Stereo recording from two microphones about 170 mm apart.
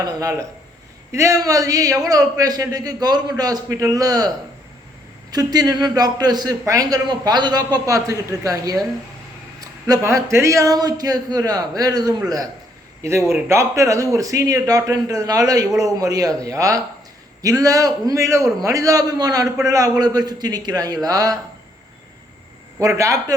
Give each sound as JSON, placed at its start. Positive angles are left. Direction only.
{"t": 0.0, "sound": "a man's voice", "side_deg": -20}
{"t": 22.8, "sound": "a man's voice", "side_deg": -20}